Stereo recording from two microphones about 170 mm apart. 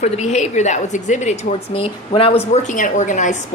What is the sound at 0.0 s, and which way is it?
A woman's voice, 40° left (ahead or behind).